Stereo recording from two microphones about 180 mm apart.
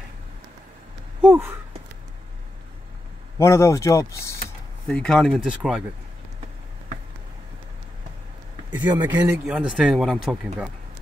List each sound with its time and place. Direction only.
1.2 s speech: 10° right (ahead or behind)
3.3 s speech: 15° left (ahead or behind)
4.8 s speech: 5° left (ahead or behind)
8.6 s speech: 25° right (ahead or behind)
9.5 s speech: 5° right (ahead or behind)